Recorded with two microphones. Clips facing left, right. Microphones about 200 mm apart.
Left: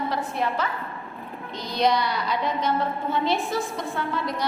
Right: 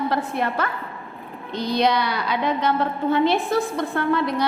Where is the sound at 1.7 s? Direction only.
65° right (ahead or behind).